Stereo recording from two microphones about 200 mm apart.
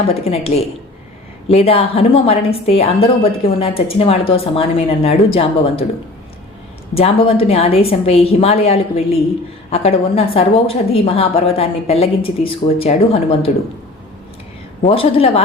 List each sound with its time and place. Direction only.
0.1 s a woman's voice: 30° left (ahead or behind)
6.9 s a woman's voice: 30° left (ahead or behind)
14.8 s a woman's voice: 30° left (ahead or behind)